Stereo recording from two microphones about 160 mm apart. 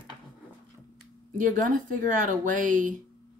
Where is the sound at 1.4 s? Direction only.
55° right (ahead or behind).